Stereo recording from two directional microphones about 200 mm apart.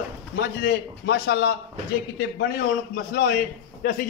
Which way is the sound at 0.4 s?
55° left (ahead or behind).